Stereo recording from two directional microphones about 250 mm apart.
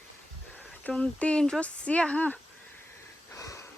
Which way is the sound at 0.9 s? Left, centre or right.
Centre.